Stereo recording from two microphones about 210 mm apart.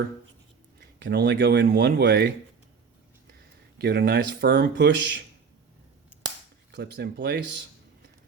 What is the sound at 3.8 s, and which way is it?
Speech, 50° right (ahead or behind).